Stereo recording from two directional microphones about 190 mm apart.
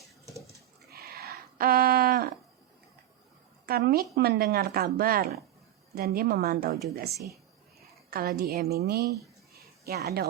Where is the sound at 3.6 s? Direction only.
55° right (ahead or behind).